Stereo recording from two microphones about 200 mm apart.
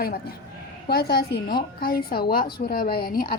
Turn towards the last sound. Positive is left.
turn(degrees=50)  # may be behind; listen again after turning